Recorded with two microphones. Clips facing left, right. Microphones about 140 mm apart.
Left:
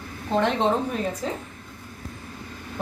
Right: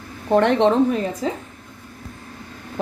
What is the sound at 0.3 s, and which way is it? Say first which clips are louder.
Speech: right 7 dB; 60° right (ahead or behind).